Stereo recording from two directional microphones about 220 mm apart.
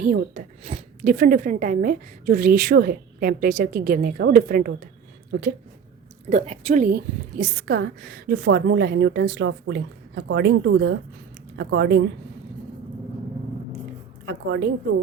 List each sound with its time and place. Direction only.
0.0 s a woman's voice: 35° right (ahead or behind)
6.3 s a woman's voice: 30° right (ahead or behind); by 12.0 s 50° right (ahead or behind)
14.3 s a woman's voice: 55° right (ahead or behind)